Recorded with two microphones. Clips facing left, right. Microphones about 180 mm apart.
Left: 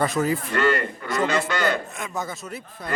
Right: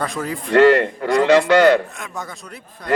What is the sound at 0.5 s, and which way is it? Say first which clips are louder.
Speech: right 15 dB; 75° right (ahead or behind).